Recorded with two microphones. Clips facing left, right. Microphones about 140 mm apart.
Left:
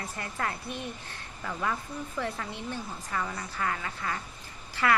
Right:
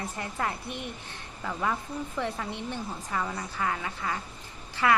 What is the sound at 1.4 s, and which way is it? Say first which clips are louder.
Speech: right 2 dB; 10° right (ahead or behind).